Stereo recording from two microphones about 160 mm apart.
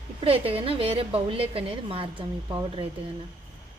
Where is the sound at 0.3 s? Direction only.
35° right (ahead or behind).